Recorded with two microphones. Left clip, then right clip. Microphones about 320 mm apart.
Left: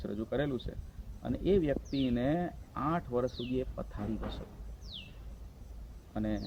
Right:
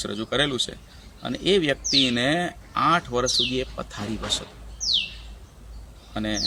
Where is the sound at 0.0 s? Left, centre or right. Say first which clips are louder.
Right 10 dB; left.